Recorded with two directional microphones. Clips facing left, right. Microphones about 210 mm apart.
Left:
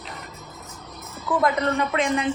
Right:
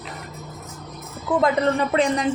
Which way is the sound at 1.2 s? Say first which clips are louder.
Right 3 dB; 30° right (ahead or behind).